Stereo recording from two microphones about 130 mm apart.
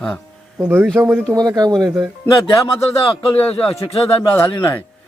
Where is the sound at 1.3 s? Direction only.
25° right (ahead or behind).